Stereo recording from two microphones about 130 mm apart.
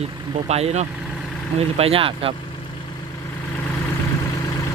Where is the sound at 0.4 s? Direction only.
55° right (ahead or behind).